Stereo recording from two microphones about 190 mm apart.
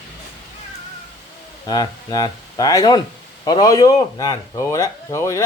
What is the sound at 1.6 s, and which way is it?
A man's voice, 20° left (ahead or behind).